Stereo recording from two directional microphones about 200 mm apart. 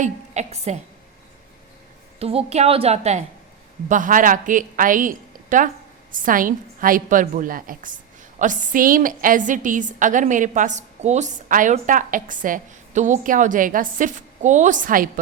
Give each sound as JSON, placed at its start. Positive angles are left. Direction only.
{"t": 0.0, "sound": "a woman's voice", "side_deg": -35}
{"t": 2.1, "sound": "a woman's voice", "side_deg": -30}